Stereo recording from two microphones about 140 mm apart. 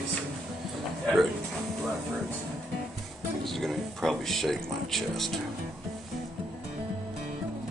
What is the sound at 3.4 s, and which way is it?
Speech, centre (ahead or behind).